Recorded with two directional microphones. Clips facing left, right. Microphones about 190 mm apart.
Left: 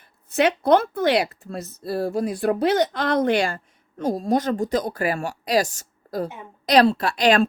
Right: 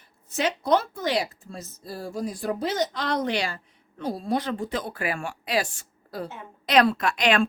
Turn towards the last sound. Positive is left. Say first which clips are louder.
# left 4 dB
turn(degrees=35)  # may be behind; listen again after turning